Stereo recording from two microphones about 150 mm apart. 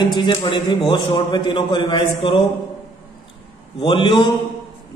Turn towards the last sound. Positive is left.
turn(degrees=35)  # may be behind; listen again after turning